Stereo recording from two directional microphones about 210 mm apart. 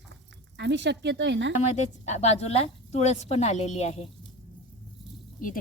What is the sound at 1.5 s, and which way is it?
Speech, 35° left (ahead or behind).